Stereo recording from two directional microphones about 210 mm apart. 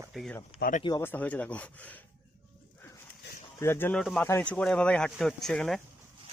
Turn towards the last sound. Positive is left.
turn(degrees=0)  # may be behind; listen again after turning